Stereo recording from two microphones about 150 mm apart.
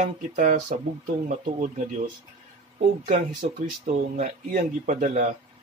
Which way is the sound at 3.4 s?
60° right (ahead or behind).